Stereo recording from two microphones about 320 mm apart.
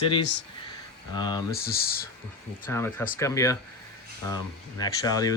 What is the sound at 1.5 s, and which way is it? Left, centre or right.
Speech, left.